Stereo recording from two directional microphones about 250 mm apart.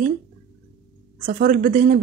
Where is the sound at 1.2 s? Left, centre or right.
Right.